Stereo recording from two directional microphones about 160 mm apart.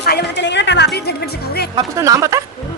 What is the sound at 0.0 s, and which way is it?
Speech, 90° left.